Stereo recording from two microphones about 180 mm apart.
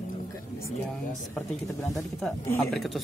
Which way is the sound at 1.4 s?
10° left (ahead or behind).